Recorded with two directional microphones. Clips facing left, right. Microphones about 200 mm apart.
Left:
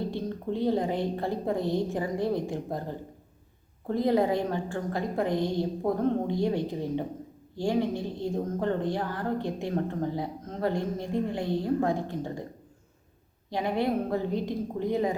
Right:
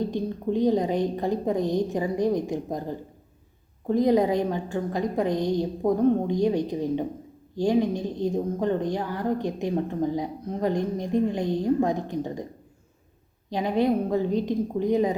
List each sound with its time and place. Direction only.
0.1 s a woman's voice: 15° right (ahead or behind)
3.8 s a woman's voice: 15° right (ahead or behind)
13.5 s a woman's voice: 20° right (ahead or behind)